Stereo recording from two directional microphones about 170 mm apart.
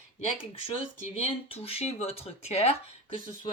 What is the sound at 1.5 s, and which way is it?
Speech, 35° left (ahead or behind).